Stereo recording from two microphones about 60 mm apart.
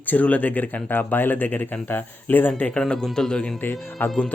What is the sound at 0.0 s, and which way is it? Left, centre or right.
Speech, left.